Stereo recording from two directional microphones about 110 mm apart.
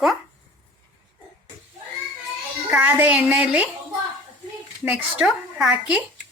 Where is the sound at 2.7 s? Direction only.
10° right (ahead or behind).